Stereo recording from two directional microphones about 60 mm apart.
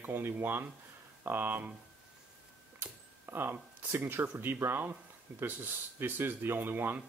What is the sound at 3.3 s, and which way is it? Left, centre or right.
Speech, right.